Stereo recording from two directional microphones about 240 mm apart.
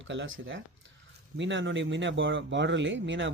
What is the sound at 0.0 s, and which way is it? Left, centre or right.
Speech, right.